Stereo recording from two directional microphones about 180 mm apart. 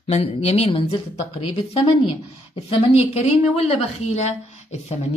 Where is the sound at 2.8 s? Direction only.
35° left (ahead or behind).